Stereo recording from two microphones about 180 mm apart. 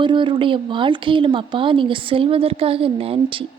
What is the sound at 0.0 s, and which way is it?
A woman's voice, 25° right (ahead or behind).